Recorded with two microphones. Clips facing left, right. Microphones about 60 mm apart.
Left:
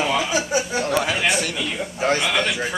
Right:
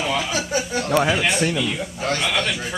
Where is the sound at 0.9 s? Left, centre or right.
Centre.